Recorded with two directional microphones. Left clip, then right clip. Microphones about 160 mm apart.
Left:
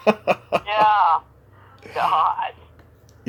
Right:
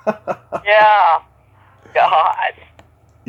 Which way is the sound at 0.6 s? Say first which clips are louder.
Right 8 dB; 30° right (ahead or behind).